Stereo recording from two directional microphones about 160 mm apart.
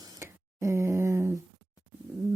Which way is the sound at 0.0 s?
20° right (ahead or behind).